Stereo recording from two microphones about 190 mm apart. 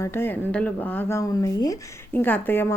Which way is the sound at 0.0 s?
10° left (ahead or behind).